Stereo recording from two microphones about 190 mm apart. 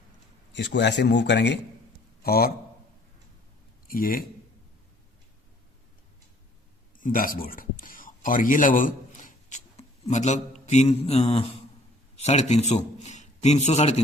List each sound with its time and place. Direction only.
0.5 s speech: 70° left (ahead or behind)
2.2 s a man's voice: 55° left (ahead or behind)
3.8 s a man's voice: 50° left (ahead or behind)
7.0 s a man's voice: 45° left (ahead or behind)